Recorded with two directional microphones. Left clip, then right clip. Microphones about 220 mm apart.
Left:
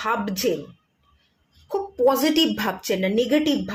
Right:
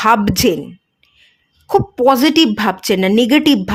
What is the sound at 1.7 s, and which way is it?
A woman's voice, 40° right (ahead or behind).